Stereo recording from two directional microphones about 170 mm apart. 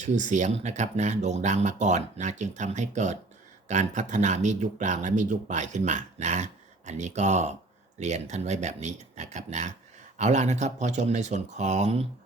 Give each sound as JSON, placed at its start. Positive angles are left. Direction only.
{"t": 0.0, "sound": "speech", "side_deg": -45}